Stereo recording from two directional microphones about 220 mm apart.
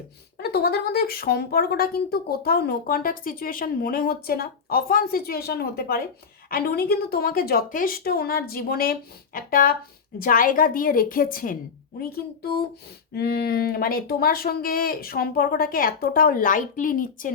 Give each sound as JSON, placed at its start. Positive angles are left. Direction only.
{"t": 0.4, "sound": "speech", "side_deg": 45}